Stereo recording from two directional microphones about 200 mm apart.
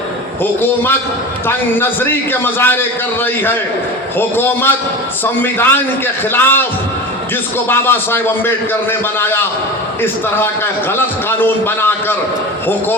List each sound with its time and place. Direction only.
0.6 s a man's voice: 10° left (ahead or behind)
4.2 s a man's voice: 10° left (ahead or behind)
7.7 s a man's voice: 10° left (ahead or behind)